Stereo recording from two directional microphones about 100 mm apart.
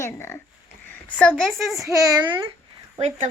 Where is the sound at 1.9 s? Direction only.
35° right (ahead or behind).